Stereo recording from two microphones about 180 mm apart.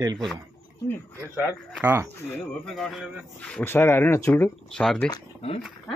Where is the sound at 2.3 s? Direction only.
Centre (ahead or behind).